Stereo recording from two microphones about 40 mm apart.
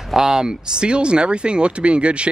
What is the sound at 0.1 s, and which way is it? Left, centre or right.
Speech, centre.